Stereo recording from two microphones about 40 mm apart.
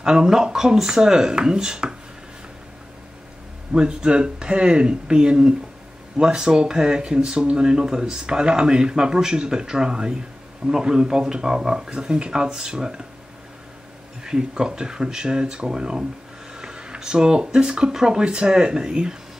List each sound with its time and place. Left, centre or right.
0.0 s speech: centre
3.7 s speech: right
14.2 s speech: centre